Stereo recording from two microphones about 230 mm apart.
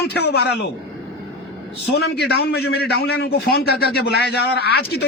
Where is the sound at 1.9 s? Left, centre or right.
Left.